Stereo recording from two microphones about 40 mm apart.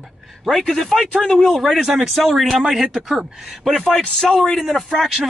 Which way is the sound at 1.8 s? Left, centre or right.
Centre.